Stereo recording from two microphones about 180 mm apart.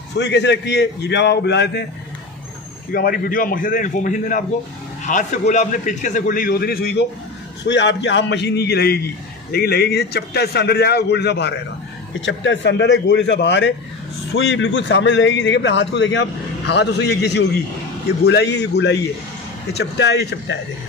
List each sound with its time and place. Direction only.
0.2 s a man's voice: 75° left (ahead or behind)
2.9 s a man's voice: 55° left (ahead or behind)
7.6 s a man's voice: 80° left
12.2 s a man's voice: 85° left; by 20.5 s 70° left (ahead or behind)